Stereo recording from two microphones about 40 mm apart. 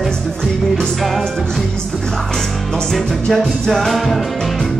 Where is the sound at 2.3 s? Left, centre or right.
Centre.